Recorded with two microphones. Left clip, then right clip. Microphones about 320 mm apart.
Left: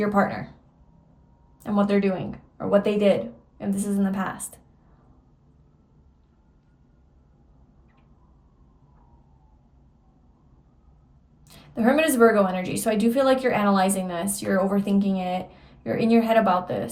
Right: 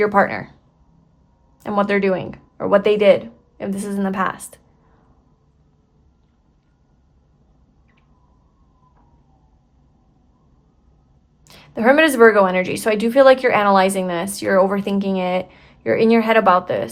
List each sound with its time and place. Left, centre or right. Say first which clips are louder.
0.0 s a woman's voice: right 7 dB; centre
1.6 s a woman's voice: right 6 dB; right
11.4 s a woman's voice: right 8 dB; centre